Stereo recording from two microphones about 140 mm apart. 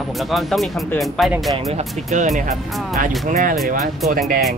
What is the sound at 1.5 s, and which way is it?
Speech, 55° right (ahead or behind).